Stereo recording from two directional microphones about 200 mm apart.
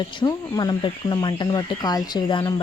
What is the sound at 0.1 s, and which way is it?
A woman's voice, 20° left (ahead or behind).